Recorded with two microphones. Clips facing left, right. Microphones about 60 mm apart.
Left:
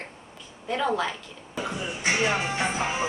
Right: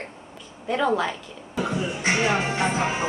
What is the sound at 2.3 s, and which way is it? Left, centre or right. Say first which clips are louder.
Music: right 3 dB; right.